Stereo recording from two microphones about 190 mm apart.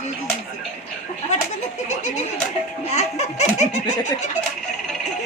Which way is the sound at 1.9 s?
35° left (ahead or behind).